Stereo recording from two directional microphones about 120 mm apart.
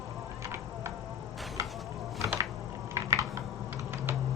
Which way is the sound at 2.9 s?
25° right (ahead or behind).